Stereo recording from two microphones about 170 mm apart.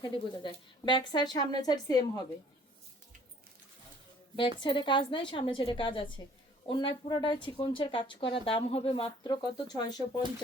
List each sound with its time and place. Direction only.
0.0 s a woman's voice: 25° left (ahead or behind)
4.4 s a woman's voice: 30° left (ahead or behind)